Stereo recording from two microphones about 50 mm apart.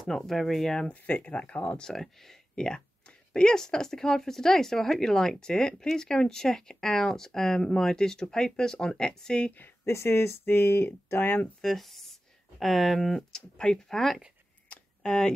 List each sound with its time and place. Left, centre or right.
0.3 s speech: centre
0.8 s speech: left
1.8 s speech: centre
2.5 s speech: centre
9.8 s speech: left
11.6 s speech: centre
14.7 s a sound: centre